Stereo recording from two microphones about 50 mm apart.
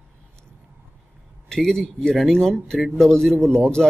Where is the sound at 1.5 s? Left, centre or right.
Centre.